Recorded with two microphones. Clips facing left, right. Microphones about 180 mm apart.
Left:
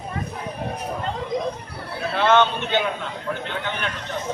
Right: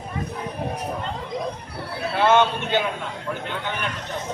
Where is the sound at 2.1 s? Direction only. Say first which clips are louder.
Even; 10° right (ahead or behind).